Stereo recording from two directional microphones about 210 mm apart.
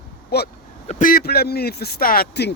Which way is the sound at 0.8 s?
40° left (ahead or behind).